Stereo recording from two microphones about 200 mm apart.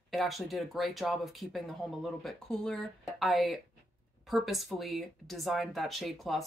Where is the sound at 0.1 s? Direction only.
Centre (ahead or behind).